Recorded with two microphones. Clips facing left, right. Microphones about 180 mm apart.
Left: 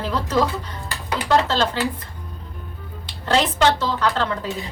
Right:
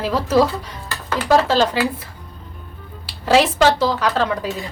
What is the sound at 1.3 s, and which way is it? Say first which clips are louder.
Speech: right 4 dB; 10° right (ahead or behind).